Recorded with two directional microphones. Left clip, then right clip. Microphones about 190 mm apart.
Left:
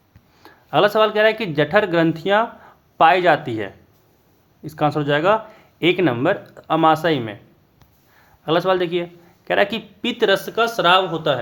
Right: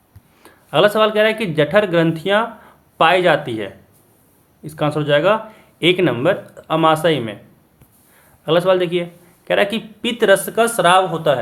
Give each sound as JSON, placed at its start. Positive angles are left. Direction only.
{"t": 0.4, "sound": "speech", "side_deg": 25}
{"t": 8.4, "sound": "speech", "side_deg": 25}